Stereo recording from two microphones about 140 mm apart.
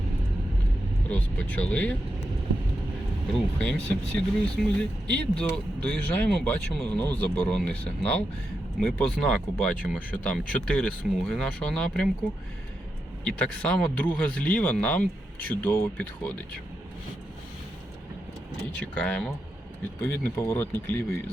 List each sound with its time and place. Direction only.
1.1 s speech: 10° left (ahead or behind)
3.6 s speech: 10° left (ahead or behind)
13.2 s speech: 10° left (ahead or behind)
18.7 s speech: 10° left (ahead or behind)